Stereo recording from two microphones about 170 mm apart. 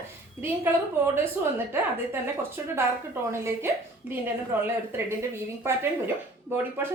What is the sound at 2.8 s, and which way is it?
A woman's voice, 15° right (ahead or behind).